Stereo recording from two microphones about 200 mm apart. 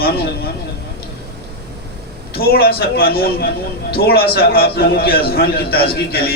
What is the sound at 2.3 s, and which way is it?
A man's voice, 50° left (ahead or behind).